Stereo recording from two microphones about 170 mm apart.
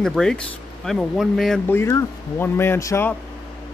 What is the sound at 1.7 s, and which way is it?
Speech, 15° left (ahead or behind).